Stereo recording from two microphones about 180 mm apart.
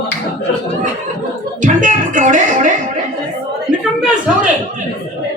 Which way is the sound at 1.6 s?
45° right (ahead or behind).